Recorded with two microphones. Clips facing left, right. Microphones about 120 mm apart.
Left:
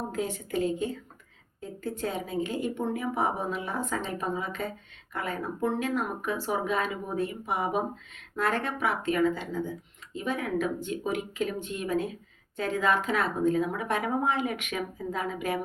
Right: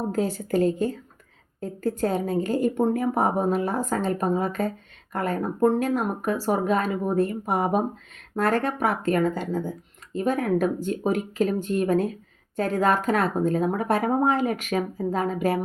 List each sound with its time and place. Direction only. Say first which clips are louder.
0.1 s speech: right 7 dB; 35° right (ahead or behind)